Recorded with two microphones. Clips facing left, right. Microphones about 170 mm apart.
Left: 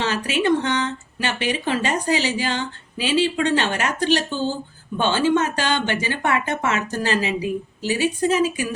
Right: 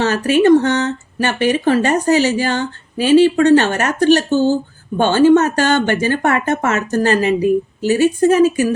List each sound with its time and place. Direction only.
0.0 s speech: 45° right (ahead or behind)